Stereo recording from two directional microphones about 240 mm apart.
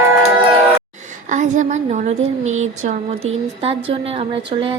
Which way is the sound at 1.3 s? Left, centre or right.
Right.